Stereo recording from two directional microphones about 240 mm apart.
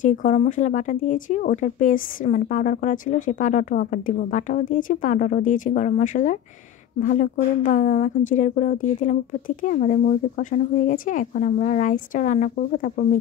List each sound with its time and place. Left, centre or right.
0.0 s a woman's voice: left